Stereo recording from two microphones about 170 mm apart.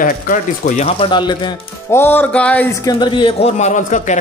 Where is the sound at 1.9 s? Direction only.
15° left (ahead or behind).